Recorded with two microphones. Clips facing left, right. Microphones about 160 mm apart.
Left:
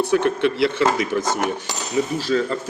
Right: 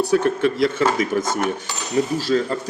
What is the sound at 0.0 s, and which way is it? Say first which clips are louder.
Speech: right 1 dB; 35° right (ahead or behind).